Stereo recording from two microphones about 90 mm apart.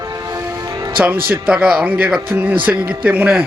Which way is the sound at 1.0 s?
20° right (ahead or behind).